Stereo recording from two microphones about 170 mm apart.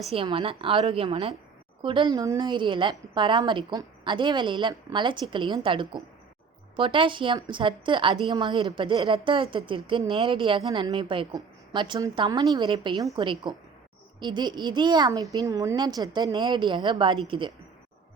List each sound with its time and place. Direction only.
0.1 s a woman's voice: 30° right (ahead or behind)